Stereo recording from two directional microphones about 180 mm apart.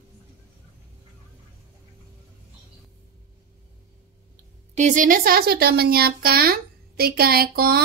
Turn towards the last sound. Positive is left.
turn(degrees=-55)  # may be behind; listen again after turning